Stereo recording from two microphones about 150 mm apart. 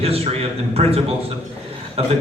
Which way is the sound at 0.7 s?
40° right (ahead or behind).